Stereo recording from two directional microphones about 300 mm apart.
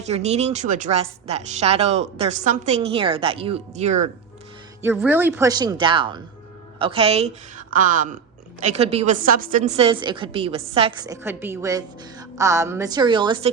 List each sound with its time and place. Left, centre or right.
0.1 s a woman's voice: right
4.8 s a woman's voice: centre